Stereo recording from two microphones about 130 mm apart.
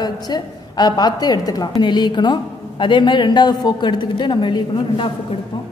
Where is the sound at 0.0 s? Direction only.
35° left (ahead or behind).